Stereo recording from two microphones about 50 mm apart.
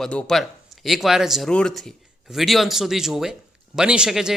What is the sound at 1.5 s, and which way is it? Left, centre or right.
Speech, centre.